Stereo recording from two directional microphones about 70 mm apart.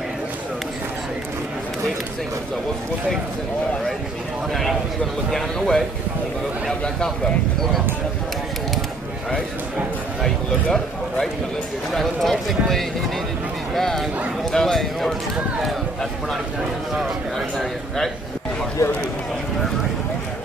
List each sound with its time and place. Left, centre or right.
5.3 s speech: centre
10.2 s speech: centre
18.8 s speech: left